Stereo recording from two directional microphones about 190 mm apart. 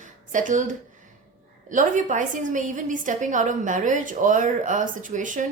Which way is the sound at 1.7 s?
40° right (ahead or behind).